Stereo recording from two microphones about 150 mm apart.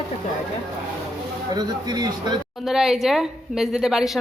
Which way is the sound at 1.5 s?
25° right (ahead or behind).